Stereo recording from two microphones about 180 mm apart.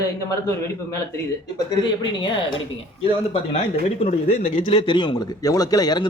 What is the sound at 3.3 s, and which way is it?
A man's voice, 35° left (ahead or behind).